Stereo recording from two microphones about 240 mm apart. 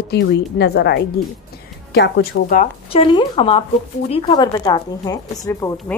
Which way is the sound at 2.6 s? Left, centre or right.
Left.